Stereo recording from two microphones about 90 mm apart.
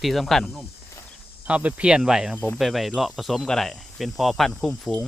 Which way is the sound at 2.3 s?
20° left (ahead or behind).